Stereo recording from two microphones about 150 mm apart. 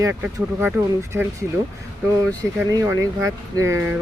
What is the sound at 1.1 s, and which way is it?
Speech, 5° right (ahead or behind).